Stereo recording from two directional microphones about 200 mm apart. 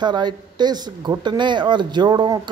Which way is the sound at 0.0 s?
20° right (ahead or behind).